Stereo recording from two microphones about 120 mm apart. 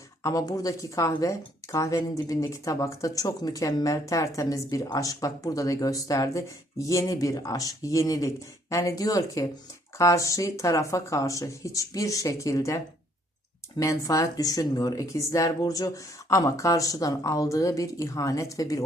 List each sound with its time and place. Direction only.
0.2 s speech: 30° left (ahead or behind)